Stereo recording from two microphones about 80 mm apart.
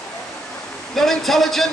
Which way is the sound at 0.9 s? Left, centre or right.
Centre.